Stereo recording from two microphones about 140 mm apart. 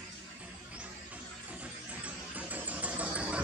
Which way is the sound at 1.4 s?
10° right (ahead or behind).